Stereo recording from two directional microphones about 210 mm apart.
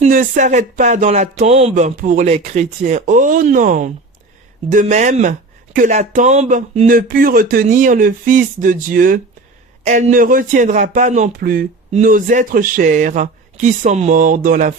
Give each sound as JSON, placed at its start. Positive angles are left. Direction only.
{"t": 0.0, "sound": "speech", "side_deg": -40}